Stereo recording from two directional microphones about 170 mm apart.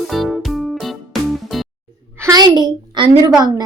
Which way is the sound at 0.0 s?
Centre (ahead or behind).